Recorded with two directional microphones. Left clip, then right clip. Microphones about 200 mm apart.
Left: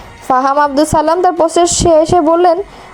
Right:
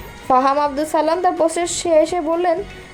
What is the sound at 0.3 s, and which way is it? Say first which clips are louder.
A woman's voice: left 5 dB; 40° left (ahead or behind).